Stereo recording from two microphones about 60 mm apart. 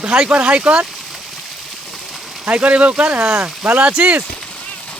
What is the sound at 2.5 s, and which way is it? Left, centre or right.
Speech, right.